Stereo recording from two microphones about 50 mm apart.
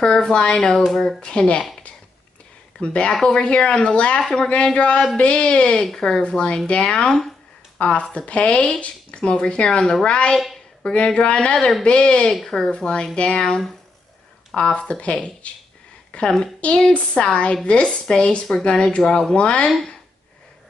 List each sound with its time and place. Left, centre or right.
0.0 s speech: centre
2.8 s speech: left
12.3 s a woman's voice: centre